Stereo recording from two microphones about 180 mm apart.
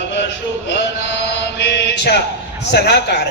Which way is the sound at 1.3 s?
70° left (ahead or behind).